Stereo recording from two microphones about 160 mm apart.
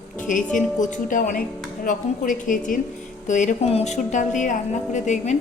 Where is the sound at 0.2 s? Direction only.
55° left (ahead or behind).